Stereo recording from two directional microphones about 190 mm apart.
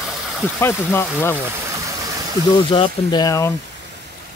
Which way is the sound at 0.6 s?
10° left (ahead or behind).